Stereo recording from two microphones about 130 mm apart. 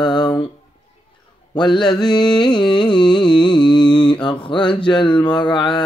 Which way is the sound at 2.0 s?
35° left (ahead or behind).